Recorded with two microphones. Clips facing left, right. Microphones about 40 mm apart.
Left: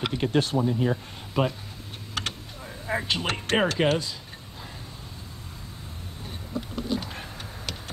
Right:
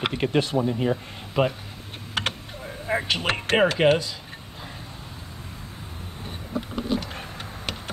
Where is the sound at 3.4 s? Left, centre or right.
Right.